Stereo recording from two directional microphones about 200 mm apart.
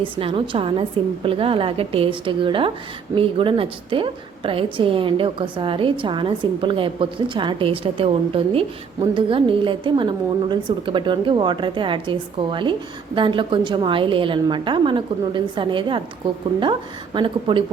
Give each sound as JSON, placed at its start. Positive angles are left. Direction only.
{"t": 0.0, "sound": "a woman's voice", "side_deg": -25}
{"t": 17.2, "sound": "a woman's voice", "side_deg": -25}